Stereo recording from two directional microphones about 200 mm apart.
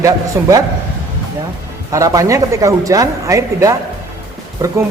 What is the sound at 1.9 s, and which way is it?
Speech, 15° right (ahead or behind).